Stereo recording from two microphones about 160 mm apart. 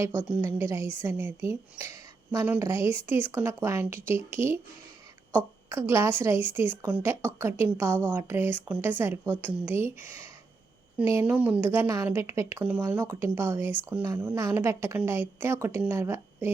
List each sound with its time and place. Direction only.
0.0 s a woman's voice: 15° right (ahead or behind)
5.6 s a woman's voice: 15° right (ahead or behind)
10.9 s a woman's voice: 10° right (ahead or behind)